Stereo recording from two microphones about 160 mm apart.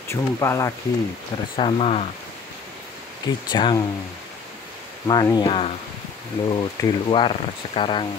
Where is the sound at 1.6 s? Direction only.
35° left (ahead or behind).